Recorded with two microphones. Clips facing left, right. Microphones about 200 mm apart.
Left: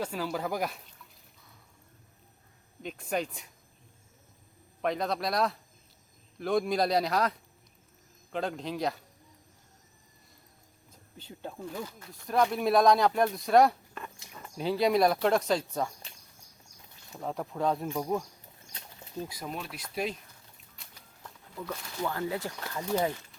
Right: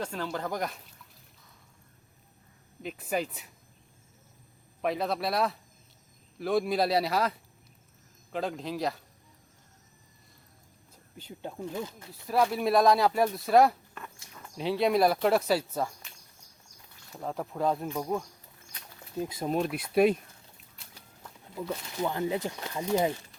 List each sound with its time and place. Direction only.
0.0 s speech: 5° left (ahead or behind)
2.8 s speech: 5° right (ahead or behind)
4.8 s speech: 5° right (ahead or behind)
11.2 s speech: 10° right (ahead or behind)
11.7 s speech: 25° right (ahead or behind)
12.2 s speech: 5° right (ahead or behind)
17.2 s speech: centre (ahead or behind)
19.2 s speech: 25° right (ahead or behind)
19.5 s speech: 45° right (ahead or behind)
19.9 s speech: 60° right (ahead or behind)
21.5 s speech: 25° right (ahead or behind)